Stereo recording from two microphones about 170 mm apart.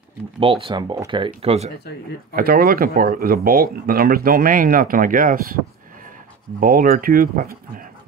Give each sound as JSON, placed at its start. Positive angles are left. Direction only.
{"t": 0.4, "sound": "speech", "side_deg": -30}
{"t": 2.3, "sound": "speech", "side_deg": -60}
{"t": 6.6, "sound": "speech", "side_deg": -55}